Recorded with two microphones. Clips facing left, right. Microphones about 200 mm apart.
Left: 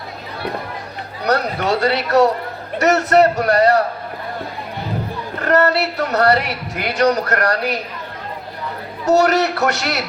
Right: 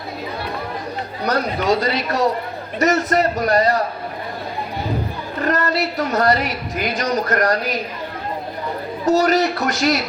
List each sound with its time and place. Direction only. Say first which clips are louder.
1.2 s speech: left 2 dB; 70° left (ahead or behind)
5.5 s speech: left 5 dB; 70° left (ahead or behind)
9.0 s speech: left 1 dB; 70° left (ahead or behind)